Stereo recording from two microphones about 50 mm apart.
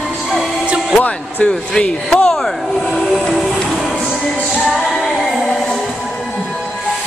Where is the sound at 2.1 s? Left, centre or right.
Centre.